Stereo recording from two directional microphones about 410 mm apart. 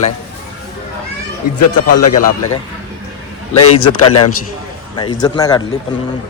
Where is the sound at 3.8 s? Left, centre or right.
Centre.